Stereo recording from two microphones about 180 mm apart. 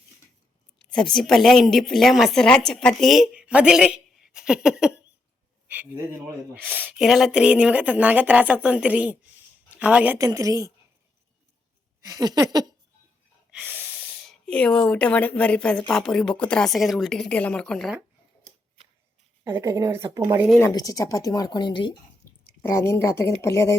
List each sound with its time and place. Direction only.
0.8 s a woman's voice: 5° left (ahead or behind)
10.2 s a sound: 20° right (ahead or behind)
12.0 s a sound: 20° right (ahead or behind)
13.5 s snort: 5° right (ahead or behind)
13.8 s a woman's voice: centre (ahead or behind)
19.5 s speech: 15° right (ahead or behind)
20.6 s speech: 20° left (ahead or behind)
22.6 s speech: 15° left (ahead or behind)